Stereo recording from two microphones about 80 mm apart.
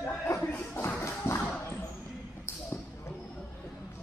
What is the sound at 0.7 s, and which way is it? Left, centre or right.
Shuffle, left.